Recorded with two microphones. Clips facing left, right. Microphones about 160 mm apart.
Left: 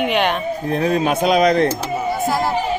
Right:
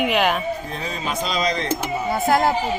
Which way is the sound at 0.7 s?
60° left (ahead or behind).